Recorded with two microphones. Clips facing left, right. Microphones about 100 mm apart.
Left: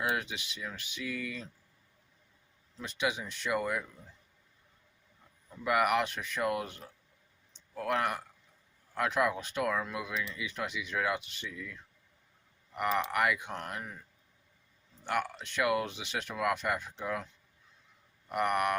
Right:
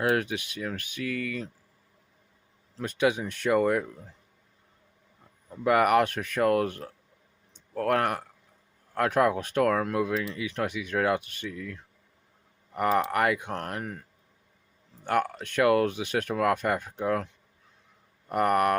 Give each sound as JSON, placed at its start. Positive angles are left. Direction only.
{"t": 0.2, "sound": "speech", "side_deg": -50}
{"t": 2.7, "sound": "speech", "side_deg": -50}
{"t": 5.5, "sound": "speech", "side_deg": -45}
{"t": 13.5, "sound": "speech", "side_deg": -50}
{"t": 15.0, "sound": "speech", "side_deg": -45}
{"t": 18.3, "sound": "speech", "side_deg": -45}